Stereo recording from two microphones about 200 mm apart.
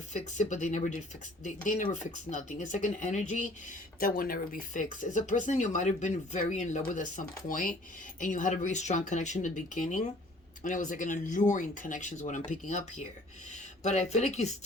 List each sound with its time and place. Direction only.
0.1 s speech: 35° left (ahead or behind)